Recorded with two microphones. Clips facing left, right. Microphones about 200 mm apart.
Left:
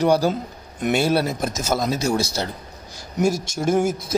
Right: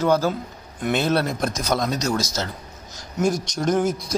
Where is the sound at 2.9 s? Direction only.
5° left (ahead or behind).